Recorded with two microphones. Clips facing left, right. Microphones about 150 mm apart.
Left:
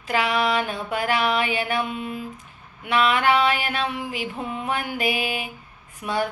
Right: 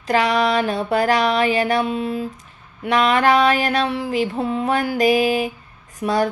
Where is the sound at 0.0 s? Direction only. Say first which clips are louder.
Right 5 dB; 40° right (ahead or behind).